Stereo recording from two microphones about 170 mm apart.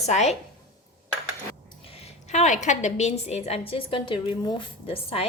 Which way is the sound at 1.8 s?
35° left (ahead or behind).